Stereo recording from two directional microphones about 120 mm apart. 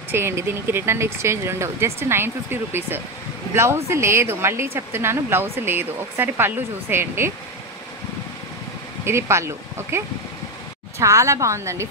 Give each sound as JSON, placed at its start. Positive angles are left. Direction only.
{"t": 0.1, "sound": "speech", "side_deg": -20}
{"t": 9.0, "sound": "speech", "side_deg": -20}